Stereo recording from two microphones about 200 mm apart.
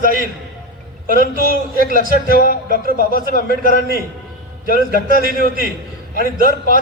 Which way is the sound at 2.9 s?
45° left (ahead or behind).